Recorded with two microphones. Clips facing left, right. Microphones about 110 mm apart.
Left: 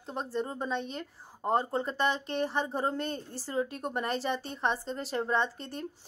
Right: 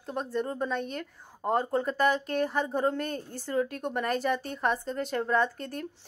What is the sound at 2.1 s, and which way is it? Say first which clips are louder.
Speech: right 3 dB; 30° left (ahead or behind).